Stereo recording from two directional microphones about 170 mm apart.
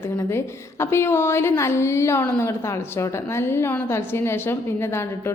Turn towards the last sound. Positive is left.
turn(degrees=15)  # may be behind; listen again after turning